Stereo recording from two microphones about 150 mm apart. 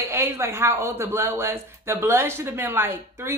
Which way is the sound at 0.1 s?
15° right (ahead or behind).